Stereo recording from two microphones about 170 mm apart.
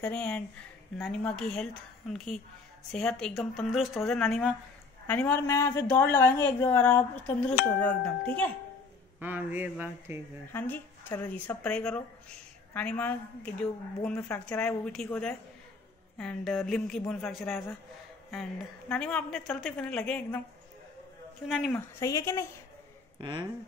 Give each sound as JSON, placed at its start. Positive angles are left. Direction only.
{"t": 0.0, "sound": "speech", "side_deg": 10}
{"t": 9.2, "sound": "speech", "side_deg": -10}
{"t": 10.5, "sound": "speech", "side_deg": 10}
{"t": 18.9, "sound": "speech", "side_deg": 5}
{"t": 21.5, "sound": "speech", "side_deg": 0}
{"t": 21.7, "sound": "speech", "side_deg": 20}
{"t": 23.1, "sound": "speech", "side_deg": -25}